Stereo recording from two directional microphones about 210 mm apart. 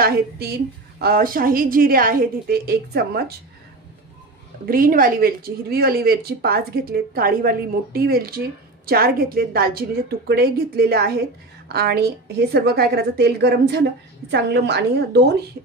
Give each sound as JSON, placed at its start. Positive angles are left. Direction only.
{"t": 0.0, "sound": "speech", "side_deg": -50}
{"t": 4.6, "sound": "speech", "side_deg": -45}